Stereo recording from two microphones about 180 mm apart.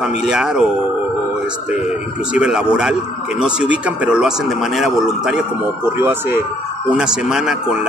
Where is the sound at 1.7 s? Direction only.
5° right (ahead or behind).